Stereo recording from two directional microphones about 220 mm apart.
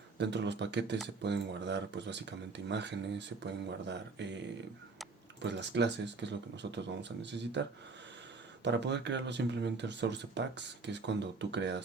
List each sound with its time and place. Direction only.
0.2 s speech: 50° right (ahead or behind)
5.4 s speech: 50° right (ahead or behind)
8.6 s speech: 50° right (ahead or behind)